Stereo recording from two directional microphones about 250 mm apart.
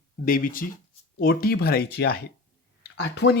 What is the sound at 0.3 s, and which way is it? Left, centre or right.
Speech, left.